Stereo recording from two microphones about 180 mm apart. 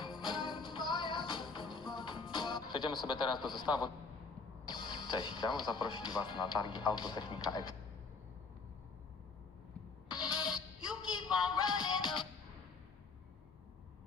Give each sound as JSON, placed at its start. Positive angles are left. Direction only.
{"t": 0.0, "sound": "music", "side_deg": 25}
{"t": 3.1, "sound": "speech", "side_deg": 25}
{"t": 11.1, "sound": "music", "side_deg": 25}